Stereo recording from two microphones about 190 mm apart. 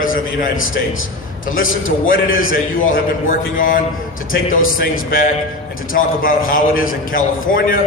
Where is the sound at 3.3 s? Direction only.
45° left (ahead or behind).